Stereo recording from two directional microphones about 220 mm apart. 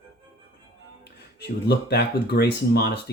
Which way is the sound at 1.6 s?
50° left (ahead or behind).